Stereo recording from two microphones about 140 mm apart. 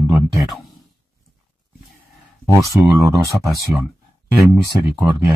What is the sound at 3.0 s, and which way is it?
Speech, 25° right (ahead or behind).